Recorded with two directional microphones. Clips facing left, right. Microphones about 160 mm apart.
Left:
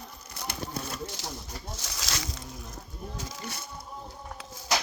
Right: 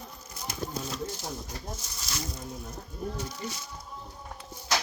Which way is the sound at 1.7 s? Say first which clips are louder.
Left 2 dB; 85° left.